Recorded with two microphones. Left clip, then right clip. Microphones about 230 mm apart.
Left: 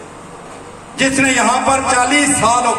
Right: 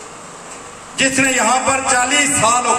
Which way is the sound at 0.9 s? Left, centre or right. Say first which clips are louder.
Left 1 dB; right.